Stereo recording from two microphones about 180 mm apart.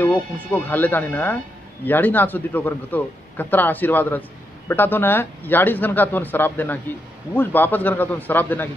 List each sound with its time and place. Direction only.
0.0 s a man's voice: 10° left (ahead or behind)